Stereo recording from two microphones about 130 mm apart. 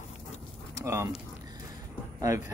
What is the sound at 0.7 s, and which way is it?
Speech, 20° right (ahead or behind).